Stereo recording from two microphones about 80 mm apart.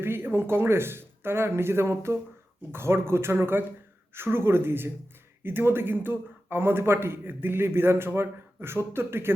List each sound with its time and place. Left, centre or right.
0.0 s speech: right